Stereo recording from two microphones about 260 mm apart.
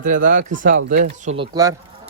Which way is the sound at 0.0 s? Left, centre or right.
Right.